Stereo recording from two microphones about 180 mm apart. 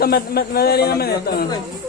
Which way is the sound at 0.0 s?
60° left (ahead or behind).